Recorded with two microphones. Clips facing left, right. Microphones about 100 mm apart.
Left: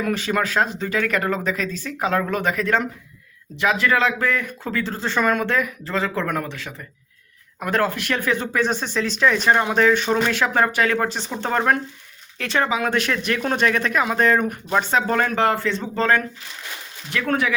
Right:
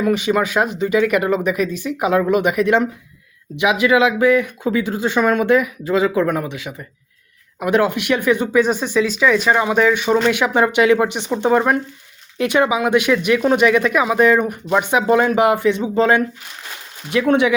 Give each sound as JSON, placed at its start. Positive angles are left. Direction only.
{"t": 0.0, "sound": "speech", "side_deg": -5}